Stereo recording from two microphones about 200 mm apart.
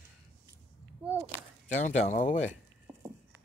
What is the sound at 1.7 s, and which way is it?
Speech, 35° left (ahead or behind).